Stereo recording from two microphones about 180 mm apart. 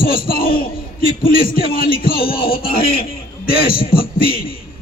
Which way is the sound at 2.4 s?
55° left (ahead or behind).